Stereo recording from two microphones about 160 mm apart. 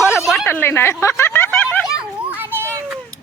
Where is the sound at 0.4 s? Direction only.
10° left (ahead or behind).